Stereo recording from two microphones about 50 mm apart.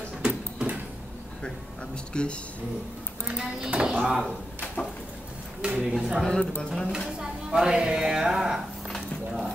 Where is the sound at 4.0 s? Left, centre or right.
Centre.